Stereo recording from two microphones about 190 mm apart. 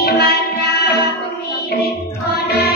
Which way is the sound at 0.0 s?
55° left (ahead or behind).